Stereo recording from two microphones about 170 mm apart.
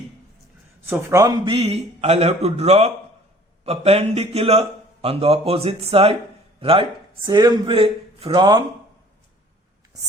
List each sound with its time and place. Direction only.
0.9 s speech: 20° right (ahead or behind)
1.5 s speech: 35° right (ahead or behind)